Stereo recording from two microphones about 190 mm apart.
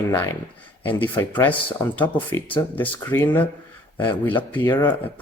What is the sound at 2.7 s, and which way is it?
Speech, 10° left (ahead or behind).